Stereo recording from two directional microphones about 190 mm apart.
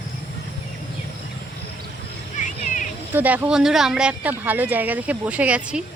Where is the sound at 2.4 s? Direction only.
40° left (ahead or behind).